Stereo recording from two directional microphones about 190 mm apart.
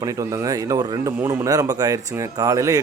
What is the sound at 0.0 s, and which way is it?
Speech, 15° right (ahead or behind).